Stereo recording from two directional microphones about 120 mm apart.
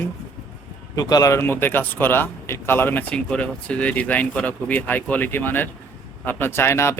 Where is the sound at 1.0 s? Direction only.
30° left (ahead or behind).